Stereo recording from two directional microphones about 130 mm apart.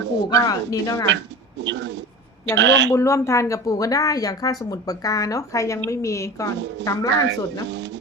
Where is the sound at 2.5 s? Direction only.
20° left (ahead or behind).